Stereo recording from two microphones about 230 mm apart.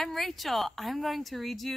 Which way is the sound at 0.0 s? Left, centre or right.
Centre.